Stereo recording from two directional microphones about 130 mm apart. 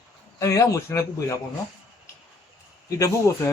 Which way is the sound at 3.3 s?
20° left (ahead or behind).